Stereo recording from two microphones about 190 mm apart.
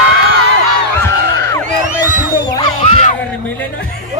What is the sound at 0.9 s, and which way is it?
Music, 15° left (ahead or behind).